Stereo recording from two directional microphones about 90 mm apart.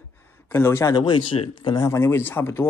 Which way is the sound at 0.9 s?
60° left (ahead or behind).